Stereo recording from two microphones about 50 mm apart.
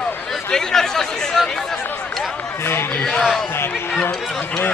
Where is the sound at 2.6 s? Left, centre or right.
Left.